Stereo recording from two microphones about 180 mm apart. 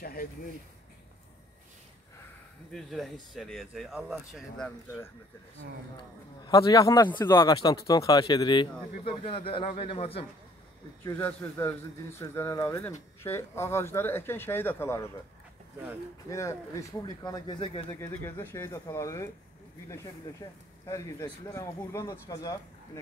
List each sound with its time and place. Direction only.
0.0 s speech: 55° left (ahead or behind)
2.7 s speech: centre (ahead or behind)
6.4 s speech: 20° left (ahead or behind)
7.3 s a man's voice: 25° left (ahead or behind)
11.1 s speech: 10° left (ahead or behind)
16.3 s speech: 15° left (ahead or behind)
18.2 s speech: 10° left (ahead or behind)